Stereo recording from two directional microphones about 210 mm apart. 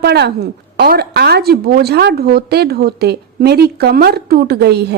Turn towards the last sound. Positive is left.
turn(degrees=-50)  # may be behind; listen again after turning